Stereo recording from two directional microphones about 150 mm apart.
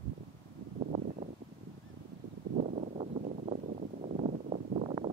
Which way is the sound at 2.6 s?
60° right (ahead or behind).